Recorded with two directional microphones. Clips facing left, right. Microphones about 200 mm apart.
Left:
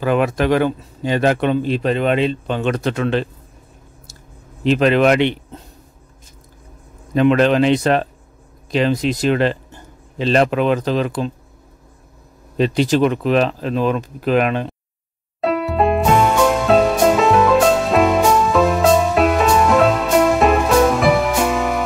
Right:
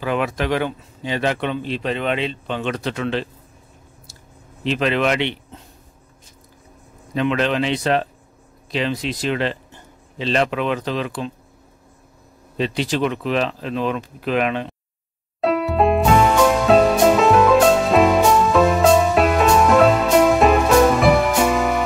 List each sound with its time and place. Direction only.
0.0 s speech: 45° left (ahead or behind)
4.6 s speech: 45° left (ahead or behind)
7.2 s speech: 45° left (ahead or behind)
12.5 s speech: 45° left (ahead or behind)
15.4 s music: centre (ahead or behind)